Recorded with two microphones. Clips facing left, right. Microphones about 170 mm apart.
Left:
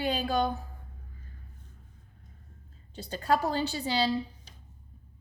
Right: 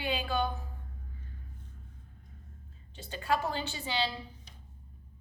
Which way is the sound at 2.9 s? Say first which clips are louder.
Left 4 dB; 40° left (ahead or behind).